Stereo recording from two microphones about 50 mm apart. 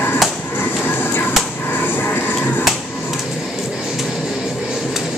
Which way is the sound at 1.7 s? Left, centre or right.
Left.